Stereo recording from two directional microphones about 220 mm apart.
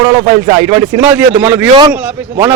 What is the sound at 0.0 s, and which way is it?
Speech, 25° right (ahead or behind).